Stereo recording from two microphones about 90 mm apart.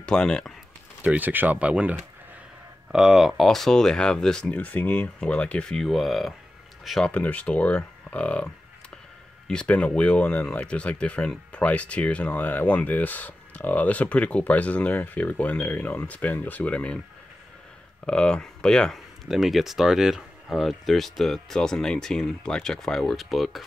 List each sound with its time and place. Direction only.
0.0 s speech: 10° left (ahead or behind)
1.0 s speech: 20° right (ahead or behind); by 7.1 s centre (ahead or behind)
7.1 s speech: 15° left (ahead or behind)
9.5 s speech: 10° left (ahead or behind)
18.0 s speech: 10° left (ahead or behind)
19.2 s speech: 5° right (ahead or behind)